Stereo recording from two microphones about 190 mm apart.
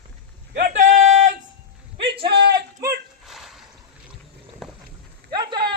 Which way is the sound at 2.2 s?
60° right (ahead or behind).